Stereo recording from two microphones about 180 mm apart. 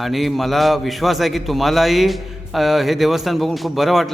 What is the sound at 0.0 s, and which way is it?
A man's voice, centre (ahead or behind).